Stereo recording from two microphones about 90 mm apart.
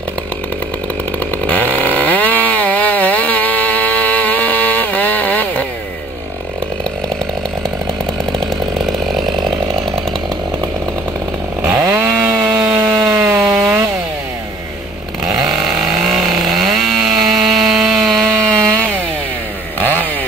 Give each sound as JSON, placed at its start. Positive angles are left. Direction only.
{"t": 1.4, "sound": "chainsaw", "side_deg": 15}
{"t": 9.1, "sound": "chainsaw", "side_deg": 0}
{"t": 11.6, "sound": "chainsaw", "side_deg": -35}
{"t": 12.0, "sound": "chainsaw", "side_deg": -20}
{"t": 15.2, "sound": "chainsaw", "side_deg": -40}
{"t": 16.1, "sound": "chainsaw", "side_deg": 0}
{"t": 19.8, "sound": "chainsaw", "side_deg": 20}